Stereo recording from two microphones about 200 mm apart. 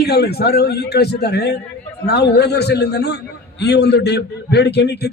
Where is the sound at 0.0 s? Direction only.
55° left (ahead or behind).